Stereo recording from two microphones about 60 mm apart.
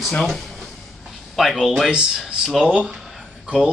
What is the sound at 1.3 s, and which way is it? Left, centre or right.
Speech, centre.